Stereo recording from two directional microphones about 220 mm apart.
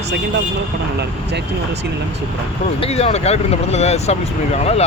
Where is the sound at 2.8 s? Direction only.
25° left (ahead or behind).